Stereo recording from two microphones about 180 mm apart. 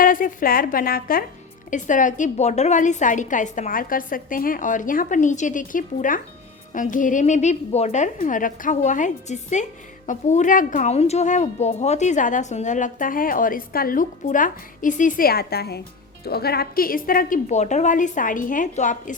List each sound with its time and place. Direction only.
0.0 s a woman's voice: 50° left (ahead or behind)